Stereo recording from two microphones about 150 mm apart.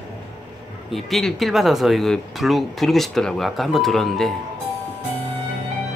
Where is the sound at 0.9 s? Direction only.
Centre (ahead or behind).